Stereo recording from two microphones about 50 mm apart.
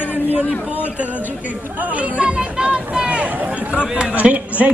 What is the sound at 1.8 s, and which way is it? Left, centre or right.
Speech, right.